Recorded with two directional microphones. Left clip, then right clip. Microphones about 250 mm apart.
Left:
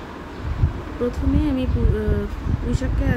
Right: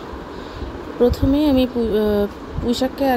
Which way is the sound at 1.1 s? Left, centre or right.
Centre.